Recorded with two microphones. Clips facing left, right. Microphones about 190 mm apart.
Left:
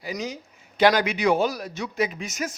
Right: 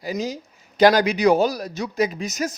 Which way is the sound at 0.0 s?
35° right (ahead or behind).